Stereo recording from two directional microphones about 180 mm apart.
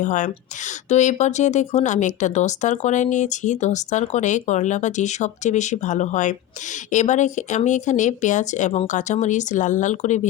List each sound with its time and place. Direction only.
0.0 s speech: 45° left (ahead or behind)